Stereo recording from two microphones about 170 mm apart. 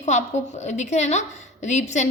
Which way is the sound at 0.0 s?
45° left (ahead or behind).